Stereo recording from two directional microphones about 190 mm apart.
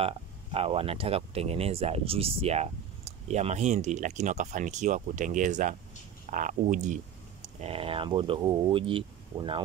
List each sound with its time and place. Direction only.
0.0 s speech: 30° right (ahead or behind)
7.6 s speech: 30° right (ahead or behind)